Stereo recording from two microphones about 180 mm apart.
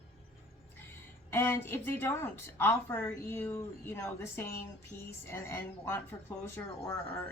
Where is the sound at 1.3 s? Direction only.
15° left (ahead or behind).